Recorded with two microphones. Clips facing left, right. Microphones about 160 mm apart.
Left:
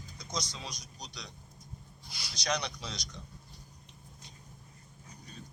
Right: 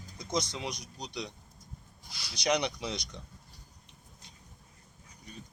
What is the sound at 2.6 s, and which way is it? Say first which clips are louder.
Speech: right 6 dB; 25° right (ahead or behind).